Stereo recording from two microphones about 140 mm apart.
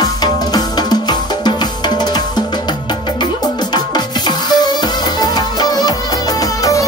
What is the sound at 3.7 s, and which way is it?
Music, 30° left (ahead or behind).